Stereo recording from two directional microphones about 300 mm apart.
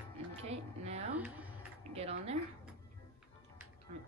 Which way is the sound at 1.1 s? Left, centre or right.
Centre.